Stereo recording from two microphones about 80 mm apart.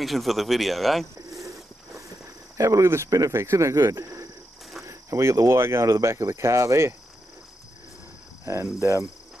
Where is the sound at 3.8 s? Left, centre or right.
Right.